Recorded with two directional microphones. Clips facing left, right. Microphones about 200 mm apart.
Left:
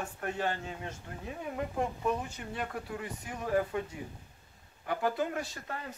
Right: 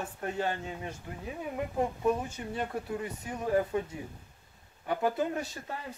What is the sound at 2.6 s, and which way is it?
Speech, 25° right (ahead or behind).